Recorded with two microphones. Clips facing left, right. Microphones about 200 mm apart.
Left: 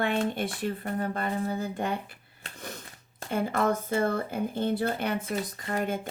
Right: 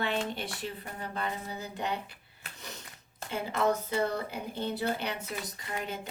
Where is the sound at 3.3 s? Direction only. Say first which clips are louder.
Left 3 dB; 50° left (ahead or behind).